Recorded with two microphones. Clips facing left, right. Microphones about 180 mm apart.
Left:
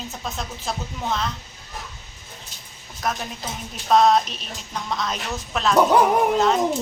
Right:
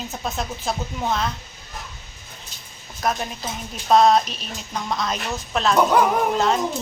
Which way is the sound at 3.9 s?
Centre (ahead or behind).